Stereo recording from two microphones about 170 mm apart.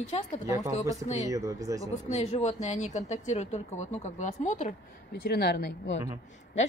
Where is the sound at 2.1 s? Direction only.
45° left (ahead or behind).